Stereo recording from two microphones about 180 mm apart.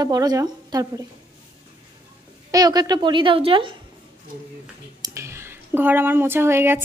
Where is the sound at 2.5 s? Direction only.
20° right (ahead or behind).